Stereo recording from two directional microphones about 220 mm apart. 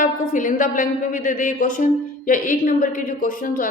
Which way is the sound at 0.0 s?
35° left (ahead or behind).